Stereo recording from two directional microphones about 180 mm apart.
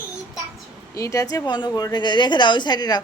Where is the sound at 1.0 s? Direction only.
15° left (ahead or behind).